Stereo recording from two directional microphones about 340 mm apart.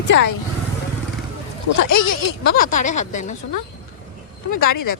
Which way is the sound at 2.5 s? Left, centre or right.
Left.